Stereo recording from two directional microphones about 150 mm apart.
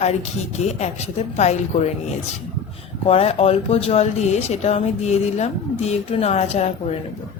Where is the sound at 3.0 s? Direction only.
40° left (ahead or behind).